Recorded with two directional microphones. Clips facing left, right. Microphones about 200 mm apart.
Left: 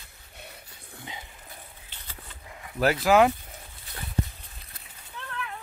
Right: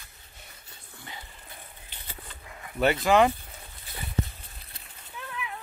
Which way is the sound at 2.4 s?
20° left (ahead or behind).